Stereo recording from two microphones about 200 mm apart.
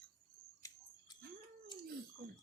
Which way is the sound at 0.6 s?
15° left (ahead or behind).